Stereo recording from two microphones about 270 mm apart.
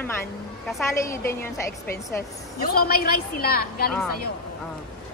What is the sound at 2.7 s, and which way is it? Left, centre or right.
A woman's voice, left.